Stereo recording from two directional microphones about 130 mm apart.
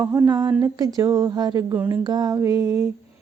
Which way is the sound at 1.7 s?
15° right (ahead or behind).